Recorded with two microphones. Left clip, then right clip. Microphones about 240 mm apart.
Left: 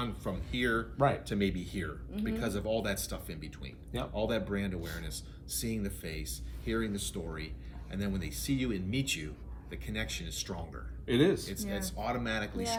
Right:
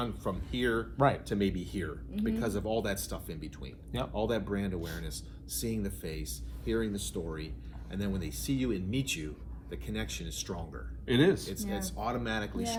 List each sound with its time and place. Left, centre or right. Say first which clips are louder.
0.0 s speech: right 2 dB; centre
11.0 s speech: right 1 dB; right
11.4 s speech: right 1 dB; centre